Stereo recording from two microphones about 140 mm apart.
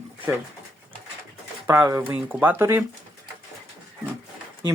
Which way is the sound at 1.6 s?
20° right (ahead or behind).